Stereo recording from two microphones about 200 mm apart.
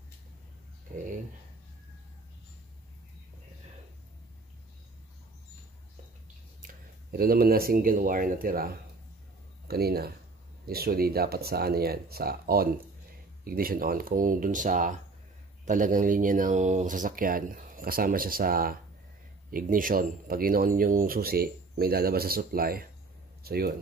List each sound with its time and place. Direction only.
6.6 s speech: 45° right (ahead or behind)